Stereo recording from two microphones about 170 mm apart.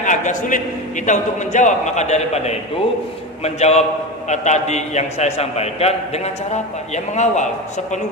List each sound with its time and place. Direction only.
0.0 s a man's voice: 45° left (ahead or behind)